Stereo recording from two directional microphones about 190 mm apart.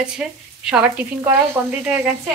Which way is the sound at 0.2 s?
5° right (ahead or behind).